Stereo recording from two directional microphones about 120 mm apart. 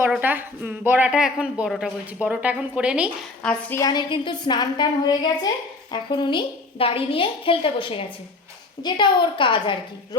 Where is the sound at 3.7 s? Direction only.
30° left (ahead or behind).